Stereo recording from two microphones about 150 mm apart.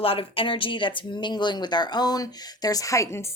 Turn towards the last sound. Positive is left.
turn(degrees=20)  # may be behind; listen again after turning